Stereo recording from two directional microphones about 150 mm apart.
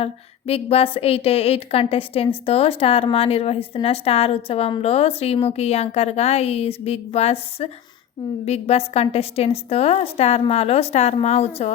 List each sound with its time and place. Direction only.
0.0 s a woman's voice: 40° left (ahead or behind)